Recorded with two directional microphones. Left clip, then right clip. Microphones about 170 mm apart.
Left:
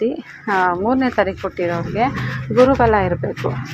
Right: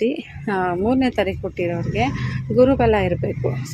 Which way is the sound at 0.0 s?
20° right (ahead or behind).